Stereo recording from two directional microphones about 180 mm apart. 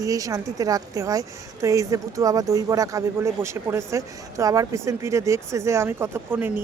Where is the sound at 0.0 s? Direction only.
20° right (ahead or behind).